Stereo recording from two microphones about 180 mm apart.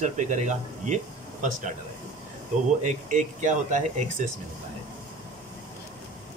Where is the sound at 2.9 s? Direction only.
45° right (ahead or behind).